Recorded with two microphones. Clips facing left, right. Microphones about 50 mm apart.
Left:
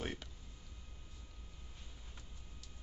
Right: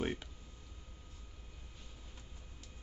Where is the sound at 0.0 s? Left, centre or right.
Centre.